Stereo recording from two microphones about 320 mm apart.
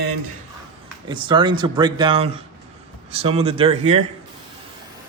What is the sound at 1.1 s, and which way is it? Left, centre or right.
Speech, centre.